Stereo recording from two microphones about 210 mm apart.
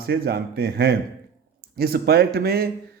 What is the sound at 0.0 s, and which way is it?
A man's voice, 50° right (ahead or behind).